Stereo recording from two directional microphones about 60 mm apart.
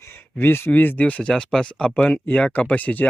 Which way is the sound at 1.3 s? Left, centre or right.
Centre.